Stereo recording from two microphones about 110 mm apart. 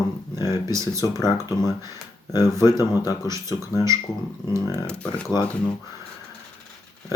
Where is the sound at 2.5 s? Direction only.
25° right (ahead or behind).